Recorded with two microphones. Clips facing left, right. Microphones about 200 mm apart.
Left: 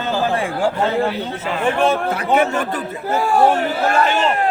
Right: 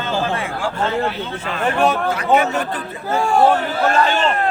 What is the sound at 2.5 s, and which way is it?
Speech, 45° left (ahead or behind).